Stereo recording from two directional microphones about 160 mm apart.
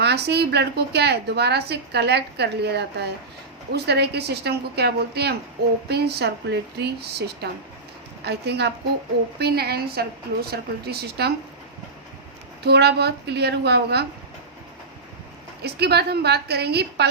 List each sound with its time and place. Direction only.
0.0 s a woman's voice: 90° right
12.6 s a woman's voice: 90° right
15.6 s a woman's voice: 90° right